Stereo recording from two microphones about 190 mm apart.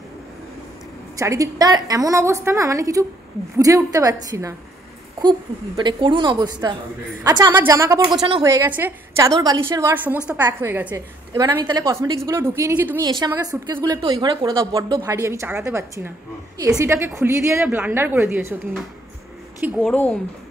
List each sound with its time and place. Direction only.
1.1 s a woman's voice: 15° right (ahead or behind)
5.8 s a woman's voice: 25° right (ahead or behind)
10.9 s a woman's voice: 20° right (ahead or behind)
19.6 s a woman's voice: centre (ahead or behind)